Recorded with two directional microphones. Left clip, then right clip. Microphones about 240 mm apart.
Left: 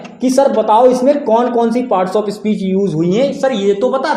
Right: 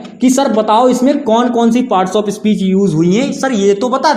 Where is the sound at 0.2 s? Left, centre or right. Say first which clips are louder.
Even; right.